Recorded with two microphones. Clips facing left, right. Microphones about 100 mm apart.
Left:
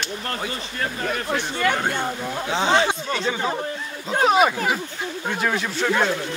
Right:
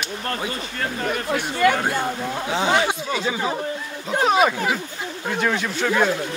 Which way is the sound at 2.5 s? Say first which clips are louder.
Left 1 dB; 30° left (ahead or behind).